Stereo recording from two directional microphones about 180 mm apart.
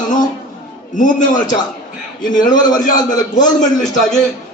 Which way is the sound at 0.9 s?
45° left (ahead or behind).